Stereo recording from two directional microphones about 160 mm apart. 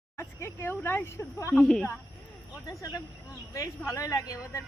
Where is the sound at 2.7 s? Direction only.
20° left (ahead or behind).